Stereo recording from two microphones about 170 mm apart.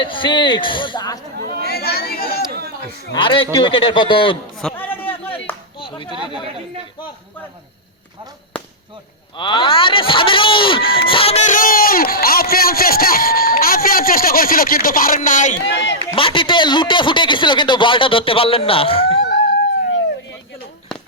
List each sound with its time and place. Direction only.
0.0 s speech: 30° left (ahead or behind)
1.4 s speech: 60° right (ahead or behind)
1.6 s chatter: 65° left (ahead or behind)
2.5 s a sound: 70° right (ahead or behind)
3.1 s a man's voice: 30° left (ahead or behind)
4.6 s a sound: 10° left (ahead or behind)
5.8 s speech: 30° left (ahead or behind)
9.4 s speech: 30° left (ahead or behind); by 15.5 s 50° left (ahead or behind)
15.6 s a man's voice: 90° left
16.1 s speech: 30° left (ahead or behind)